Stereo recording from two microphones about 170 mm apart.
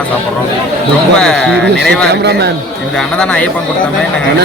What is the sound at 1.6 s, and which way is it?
Speech, 90° right.